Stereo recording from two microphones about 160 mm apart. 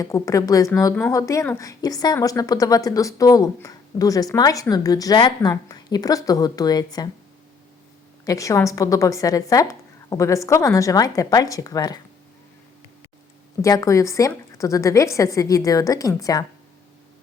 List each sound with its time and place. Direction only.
0.0 s a woman's voice: 20° left (ahead or behind)
8.2 s a woman's voice: 20° left (ahead or behind)
13.6 s a woman's voice: 20° left (ahead or behind)